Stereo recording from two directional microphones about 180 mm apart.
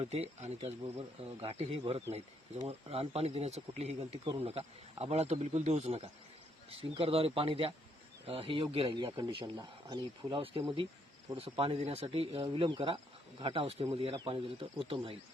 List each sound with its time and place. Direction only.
0.0 s speech: 35° right (ahead or behind)